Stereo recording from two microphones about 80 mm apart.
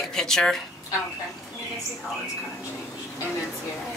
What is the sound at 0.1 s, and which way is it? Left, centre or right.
Speech, centre.